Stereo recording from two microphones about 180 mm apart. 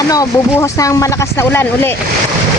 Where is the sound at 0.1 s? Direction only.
20° left (ahead or behind).